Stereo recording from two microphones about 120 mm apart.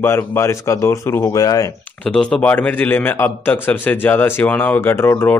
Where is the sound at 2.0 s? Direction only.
5° left (ahead or behind).